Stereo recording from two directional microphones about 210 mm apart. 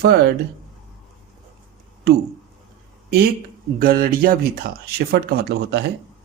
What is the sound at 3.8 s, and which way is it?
Speech, 45° right (ahead or behind).